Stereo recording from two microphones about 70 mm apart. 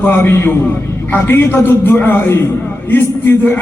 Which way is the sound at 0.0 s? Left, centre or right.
Left.